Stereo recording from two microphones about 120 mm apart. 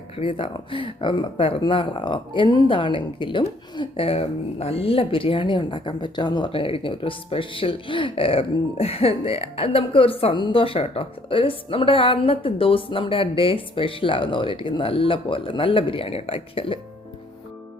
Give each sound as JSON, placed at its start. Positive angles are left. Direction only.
{"t": 0.2, "sound": "speech", "side_deg": 45}